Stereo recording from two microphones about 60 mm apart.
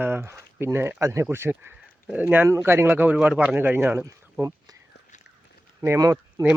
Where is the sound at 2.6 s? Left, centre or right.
Right.